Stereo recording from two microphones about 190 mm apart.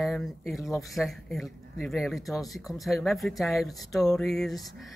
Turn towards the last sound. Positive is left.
turn(degrees=0)  # may be behind; listen again after turning